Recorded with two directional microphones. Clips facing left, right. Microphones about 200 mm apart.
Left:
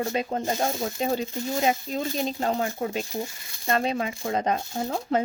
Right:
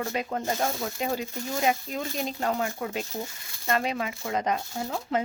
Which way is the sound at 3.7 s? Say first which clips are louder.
Left 2 dB; 30° left (ahead or behind).